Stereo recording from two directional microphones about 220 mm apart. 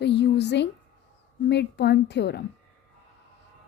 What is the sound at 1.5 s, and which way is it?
Speech, 50° left (ahead or behind).